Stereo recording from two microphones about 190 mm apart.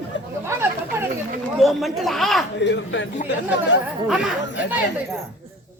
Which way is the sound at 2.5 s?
70° left (ahead or behind).